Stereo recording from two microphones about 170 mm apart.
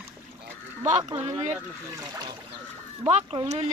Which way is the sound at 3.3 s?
35° right (ahead or behind).